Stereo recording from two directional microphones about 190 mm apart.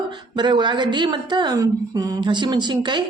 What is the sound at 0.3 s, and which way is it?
Speech, 25° right (ahead or behind).